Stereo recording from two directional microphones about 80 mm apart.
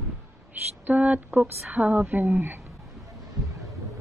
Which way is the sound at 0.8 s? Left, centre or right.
Centre.